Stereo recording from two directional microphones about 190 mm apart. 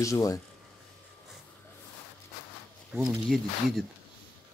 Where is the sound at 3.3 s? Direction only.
Centre (ahead or behind).